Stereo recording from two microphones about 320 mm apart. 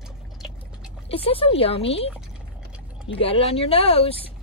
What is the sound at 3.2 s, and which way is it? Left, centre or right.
Speech, centre.